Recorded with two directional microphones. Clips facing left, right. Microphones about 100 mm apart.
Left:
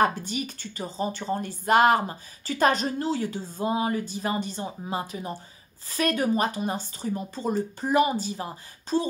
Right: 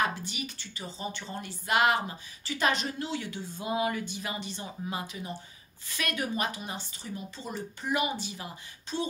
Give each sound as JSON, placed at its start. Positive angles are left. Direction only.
{"t": 0.0, "sound": "speech", "side_deg": 40}